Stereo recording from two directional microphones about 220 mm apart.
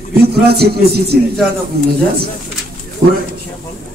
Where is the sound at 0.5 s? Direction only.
45° right (ahead or behind).